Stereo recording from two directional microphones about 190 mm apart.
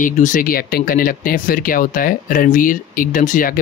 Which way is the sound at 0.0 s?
45° left (ahead or behind).